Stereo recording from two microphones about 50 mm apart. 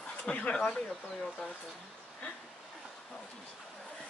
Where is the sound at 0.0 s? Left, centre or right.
Left.